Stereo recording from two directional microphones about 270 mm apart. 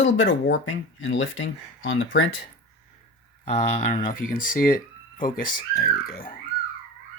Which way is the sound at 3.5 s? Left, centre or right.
Left.